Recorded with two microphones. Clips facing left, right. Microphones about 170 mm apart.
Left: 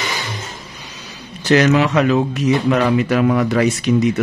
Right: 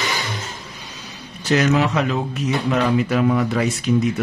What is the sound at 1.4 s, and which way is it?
Speech, 85° left.